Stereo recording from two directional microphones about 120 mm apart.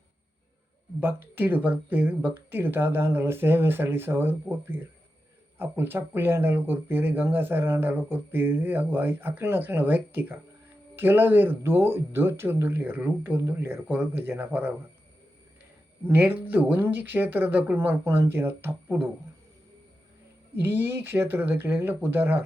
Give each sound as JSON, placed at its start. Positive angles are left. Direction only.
{"t": 0.9, "sound": "speech", "side_deg": -15}
{"t": 16.0, "sound": "speech", "side_deg": -15}
{"t": 20.6, "sound": "speech", "side_deg": -15}